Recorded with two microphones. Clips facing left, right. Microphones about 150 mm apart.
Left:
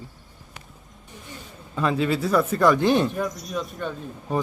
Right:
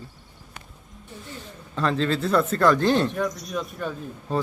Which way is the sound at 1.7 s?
10° left (ahead or behind).